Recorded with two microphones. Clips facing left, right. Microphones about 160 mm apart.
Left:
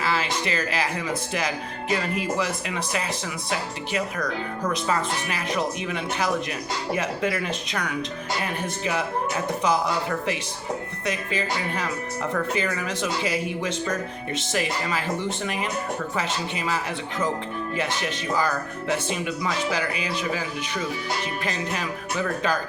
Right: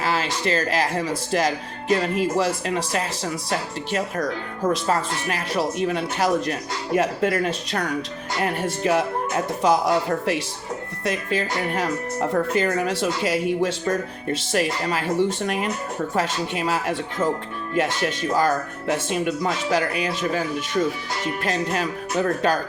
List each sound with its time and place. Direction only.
0.0 s speech: 40° right (ahead or behind)